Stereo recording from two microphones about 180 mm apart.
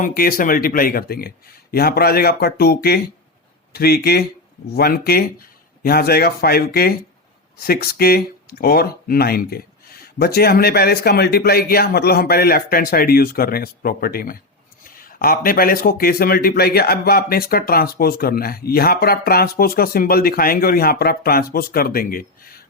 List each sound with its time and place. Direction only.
0.0 s speech: 55° left (ahead or behind)